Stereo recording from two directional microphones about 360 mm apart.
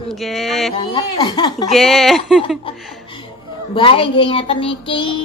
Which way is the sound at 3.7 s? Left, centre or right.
Centre.